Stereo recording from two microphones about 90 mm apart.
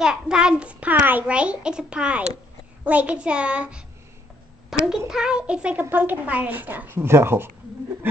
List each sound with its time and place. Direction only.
0.0 s a child's voice: 10° right (ahead or behind)
4.8 s a child's voice: 5° right (ahead or behind); by 7.5 s 25° right (ahead or behind)